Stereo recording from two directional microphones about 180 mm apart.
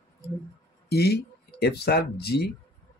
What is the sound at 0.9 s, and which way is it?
Speech, 65° left (ahead or behind).